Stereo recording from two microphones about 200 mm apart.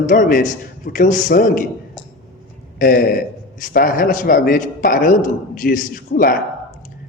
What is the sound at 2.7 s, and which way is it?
A man's voice, 45° left (ahead or behind).